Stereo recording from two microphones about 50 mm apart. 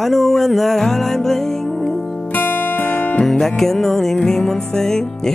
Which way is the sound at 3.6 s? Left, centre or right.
Centre.